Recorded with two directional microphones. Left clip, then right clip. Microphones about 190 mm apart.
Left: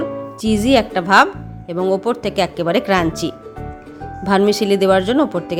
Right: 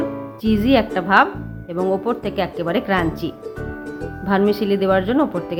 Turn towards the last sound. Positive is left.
turn(degrees=30)  # may be behind; listen again after turning